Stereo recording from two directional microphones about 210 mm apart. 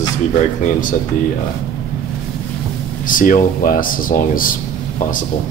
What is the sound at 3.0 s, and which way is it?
Speech, 40° left (ahead or behind).